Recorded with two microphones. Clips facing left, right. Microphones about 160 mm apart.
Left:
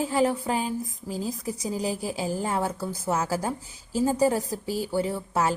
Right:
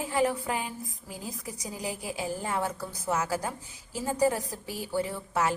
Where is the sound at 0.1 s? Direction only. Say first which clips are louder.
Left 3 dB; 30° left (ahead or behind).